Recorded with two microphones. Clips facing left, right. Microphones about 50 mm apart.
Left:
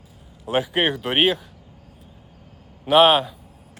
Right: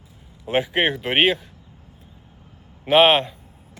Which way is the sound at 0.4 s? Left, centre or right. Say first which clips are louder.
Right 1 dB; centre.